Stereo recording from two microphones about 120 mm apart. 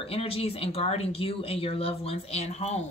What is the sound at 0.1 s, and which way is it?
Speech, 55° left (ahead or behind).